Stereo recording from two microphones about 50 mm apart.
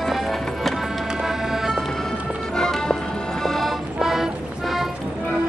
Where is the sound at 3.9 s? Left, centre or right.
Centre.